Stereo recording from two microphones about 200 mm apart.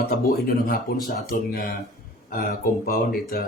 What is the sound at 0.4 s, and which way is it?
Speech, 45° left (ahead or behind).